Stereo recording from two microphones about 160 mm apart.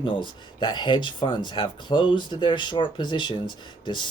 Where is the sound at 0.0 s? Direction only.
30° left (ahead or behind).